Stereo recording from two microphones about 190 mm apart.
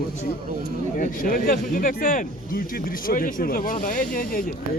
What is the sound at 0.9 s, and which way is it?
Speech, 45° left (ahead or behind).